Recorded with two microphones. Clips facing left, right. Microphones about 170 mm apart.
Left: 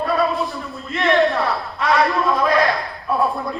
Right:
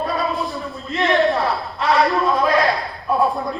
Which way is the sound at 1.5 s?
20° right (ahead or behind).